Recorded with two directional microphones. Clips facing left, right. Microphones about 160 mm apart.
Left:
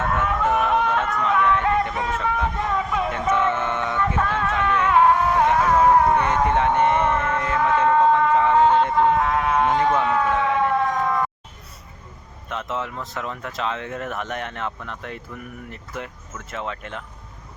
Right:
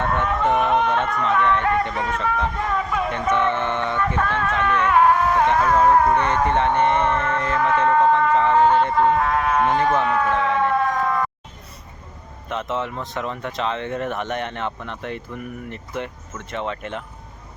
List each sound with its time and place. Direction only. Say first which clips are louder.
0.0 s a sound: right 1 dB; 5° left (ahead or behind)
2.6 s vehicle: even; 20° left (ahead or behind)
3.1 s speech: right 1 dB; 5° left (ahead or behind)
12.5 s speech: right 3 dB; centre (ahead or behind)